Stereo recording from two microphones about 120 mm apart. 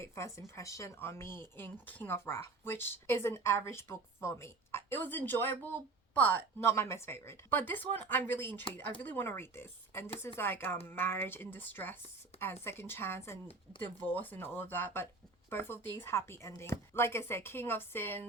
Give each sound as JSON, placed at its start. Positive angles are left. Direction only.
{"t": 0.0, "sound": "speech", "side_deg": 20}